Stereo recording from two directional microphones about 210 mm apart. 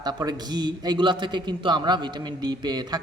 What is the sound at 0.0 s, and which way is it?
A man's voice, 20° right (ahead or behind).